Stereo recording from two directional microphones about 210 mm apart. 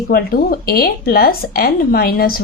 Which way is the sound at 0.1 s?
45° left (ahead or behind).